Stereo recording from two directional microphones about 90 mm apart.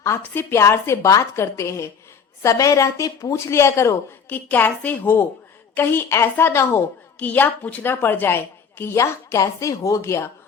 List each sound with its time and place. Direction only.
0.0 s a woman's voice: 30° left (ahead or behind)
4.3 s a woman's voice: 20° left (ahead or behind)